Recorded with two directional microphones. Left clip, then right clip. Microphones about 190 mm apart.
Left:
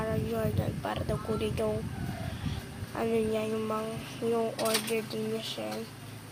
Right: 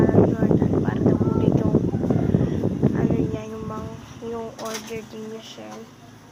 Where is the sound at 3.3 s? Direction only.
20° left (ahead or behind).